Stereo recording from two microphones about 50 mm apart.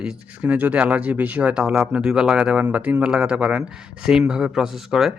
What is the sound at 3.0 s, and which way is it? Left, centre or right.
Speech, centre.